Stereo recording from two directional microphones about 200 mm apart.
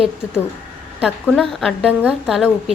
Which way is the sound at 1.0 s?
5° left (ahead or behind).